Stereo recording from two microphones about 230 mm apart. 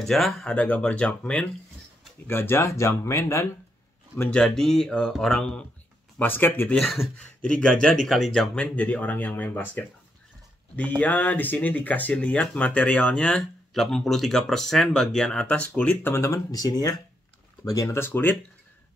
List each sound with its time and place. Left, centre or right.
0.0 s speech: centre
11.0 s speech: centre